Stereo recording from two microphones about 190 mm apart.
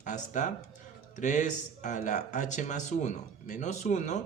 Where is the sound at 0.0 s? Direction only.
40° left (ahead or behind).